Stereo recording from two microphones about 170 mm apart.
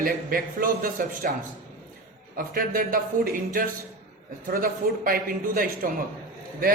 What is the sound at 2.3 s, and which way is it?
A man's voice, 55° right (ahead or behind).